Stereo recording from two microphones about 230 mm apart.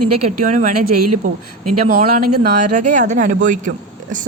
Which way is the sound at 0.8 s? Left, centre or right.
Right.